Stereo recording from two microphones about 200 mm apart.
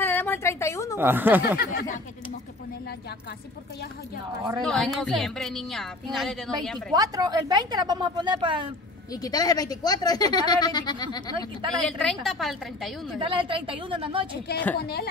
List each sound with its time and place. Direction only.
0.0 s a sound: 10° left (ahead or behind)
0.9 s speech: 10° right (ahead or behind)
1.6 s a sound: 50° left (ahead or behind)
4.6 s a woman's voice: centre (ahead or behind)
6.9 s a woman's voice: 20° right (ahead or behind)
9.1 s speech: 20° left (ahead or behind)
11.3 s a woman's voice: 25° right (ahead or behind)
11.8 s a woman's voice: 5° left (ahead or behind)
13.2 s a woman's voice: 25° right (ahead or behind)
14.8 s a sound: 55° left (ahead or behind)